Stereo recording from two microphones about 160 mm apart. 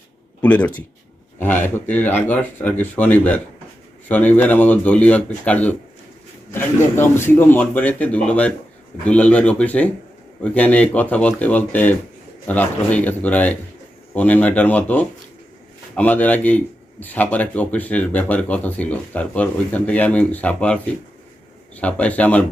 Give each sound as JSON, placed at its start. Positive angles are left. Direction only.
{"t": 0.4, "sound": "a man's voice", "side_deg": 10}
{"t": 21.8, "sound": "a man's voice", "side_deg": 10}